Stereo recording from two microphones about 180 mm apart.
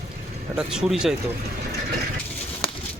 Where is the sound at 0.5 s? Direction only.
5° right (ahead or behind).